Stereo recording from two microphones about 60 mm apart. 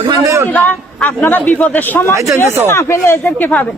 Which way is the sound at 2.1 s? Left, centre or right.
Right.